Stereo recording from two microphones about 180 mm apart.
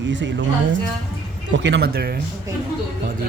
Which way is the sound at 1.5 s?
80° right.